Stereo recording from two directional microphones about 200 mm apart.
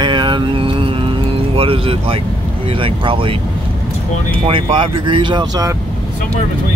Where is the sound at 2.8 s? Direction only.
25° right (ahead or behind).